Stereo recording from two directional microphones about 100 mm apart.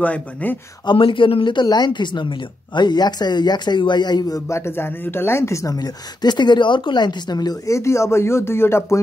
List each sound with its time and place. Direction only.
0.0 s speech: 15° left (ahead or behind)
0.8 s speech: 60° left (ahead or behind); by 4.4 s 45° left (ahead or behind)
4.5 s a woman's voice: 25° left (ahead or behind)